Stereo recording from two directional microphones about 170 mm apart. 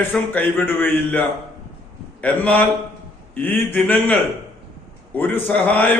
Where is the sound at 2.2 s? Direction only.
10° left (ahead or behind).